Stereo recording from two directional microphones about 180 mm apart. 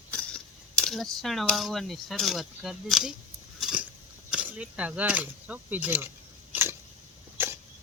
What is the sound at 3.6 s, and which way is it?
Biting, 5° right (ahead or behind).